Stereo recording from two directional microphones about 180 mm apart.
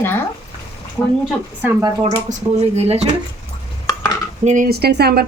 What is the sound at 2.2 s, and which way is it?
Speech, 35° right (ahead or behind).